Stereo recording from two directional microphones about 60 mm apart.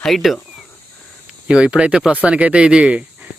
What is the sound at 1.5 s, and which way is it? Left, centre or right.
Speech, centre.